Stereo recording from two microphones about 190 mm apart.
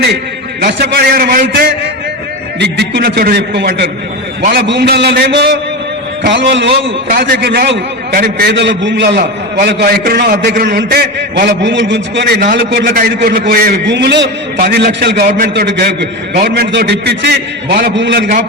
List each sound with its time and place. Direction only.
0.6 s a man's voice: 60° right (ahead or behind)
2.6 s a man's voice: 60° right (ahead or behind)
7.1 s a man's voice: 50° right (ahead or behind)